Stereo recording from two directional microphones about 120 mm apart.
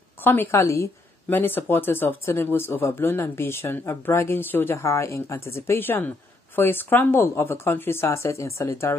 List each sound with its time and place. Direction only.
0.2 s speech: 15° left (ahead or behind)